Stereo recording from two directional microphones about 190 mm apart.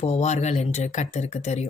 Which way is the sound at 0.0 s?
35° left (ahead or behind).